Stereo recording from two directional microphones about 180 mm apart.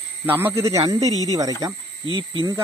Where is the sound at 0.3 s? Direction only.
10° right (ahead or behind).